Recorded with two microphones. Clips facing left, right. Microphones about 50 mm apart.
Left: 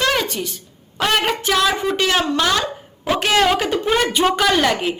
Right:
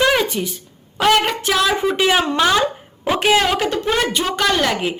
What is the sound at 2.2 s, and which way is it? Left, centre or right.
Throat clearing, right.